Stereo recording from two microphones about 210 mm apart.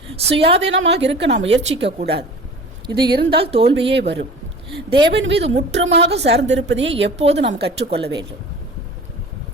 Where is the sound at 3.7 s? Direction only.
55° right (ahead or behind).